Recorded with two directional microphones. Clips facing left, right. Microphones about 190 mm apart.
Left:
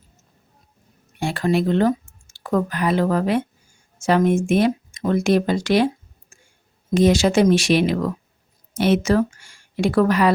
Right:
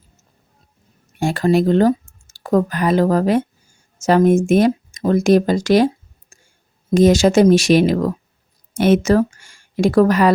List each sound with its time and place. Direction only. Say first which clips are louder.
1.2 s speech: right 5 dB; 40° right (ahead or behind)
6.3 s a sound: right 1 dB; 40° right (ahead or behind)
6.9 s speech: right 4 dB; 45° right (ahead or behind)